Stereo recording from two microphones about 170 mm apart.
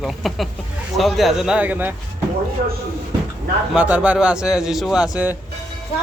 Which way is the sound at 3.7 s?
5° right (ahead or behind).